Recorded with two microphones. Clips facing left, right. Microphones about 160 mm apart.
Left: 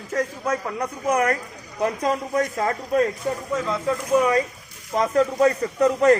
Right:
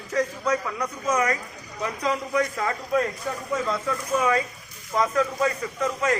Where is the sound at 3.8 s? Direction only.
20° left (ahead or behind).